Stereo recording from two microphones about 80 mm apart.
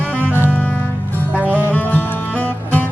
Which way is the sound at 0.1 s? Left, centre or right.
Left.